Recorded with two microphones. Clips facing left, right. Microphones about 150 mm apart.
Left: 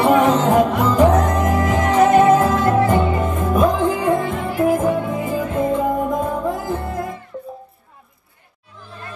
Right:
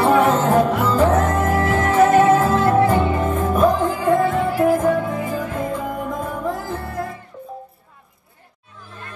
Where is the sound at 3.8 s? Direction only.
20° left (ahead or behind).